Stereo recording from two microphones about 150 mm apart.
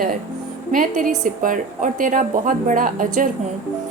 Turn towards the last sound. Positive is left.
turn(degrees=-60)  # may be behind; listen again after turning